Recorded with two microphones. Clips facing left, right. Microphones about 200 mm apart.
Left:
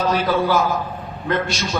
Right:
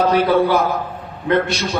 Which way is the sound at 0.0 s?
60° right (ahead or behind).